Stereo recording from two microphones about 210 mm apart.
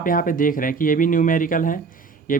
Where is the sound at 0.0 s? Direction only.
40° left (ahead or behind).